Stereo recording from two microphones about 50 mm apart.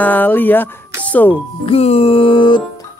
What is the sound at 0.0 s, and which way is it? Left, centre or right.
Speech, left.